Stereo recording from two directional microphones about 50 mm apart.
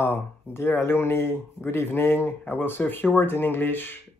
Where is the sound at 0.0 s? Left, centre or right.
Left.